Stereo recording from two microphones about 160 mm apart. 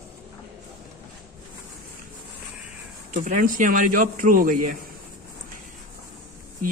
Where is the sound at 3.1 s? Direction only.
55° right (ahead or behind).